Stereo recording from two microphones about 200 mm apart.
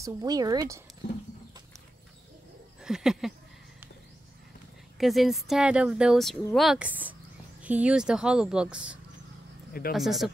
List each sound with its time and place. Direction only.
0.0 s speech: 20° right (ahead or behind)
2.8 s speech: 5° right (ahead or behind)
4.9 s speech: centre (ahead or behind)